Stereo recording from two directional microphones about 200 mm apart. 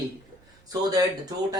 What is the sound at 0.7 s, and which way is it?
Speech, 20° right (ahead or behind).